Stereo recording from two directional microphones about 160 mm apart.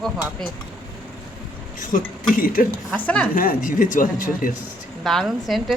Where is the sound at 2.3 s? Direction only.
60° left (ahead or behind).